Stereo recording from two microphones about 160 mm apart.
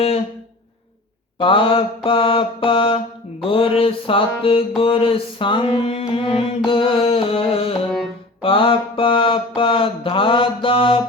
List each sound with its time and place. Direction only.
1.4 s mantra: 35° left (ahead or behind)